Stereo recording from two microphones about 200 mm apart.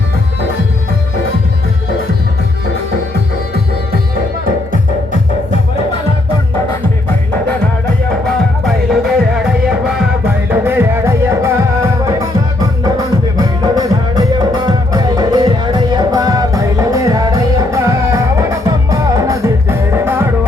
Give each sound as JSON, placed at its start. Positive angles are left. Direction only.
{"t": 8.6, "sound": "music", "side_deg": 0}